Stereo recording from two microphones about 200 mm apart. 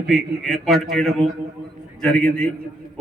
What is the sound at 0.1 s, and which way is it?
A man's voice, centre (ahead or behind).